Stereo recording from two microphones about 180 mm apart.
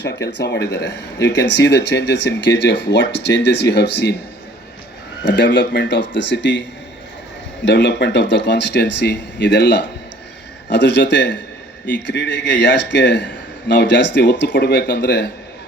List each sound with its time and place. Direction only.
0.3 s speech: 70° left (ahead or behind)
5.2 s speech: 75° left (ahead or behind)